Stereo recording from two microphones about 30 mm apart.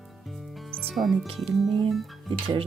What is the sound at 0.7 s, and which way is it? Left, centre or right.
Music, centre.